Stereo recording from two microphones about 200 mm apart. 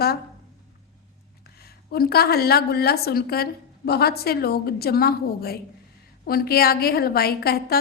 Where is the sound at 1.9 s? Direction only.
50° left (ahead or behind).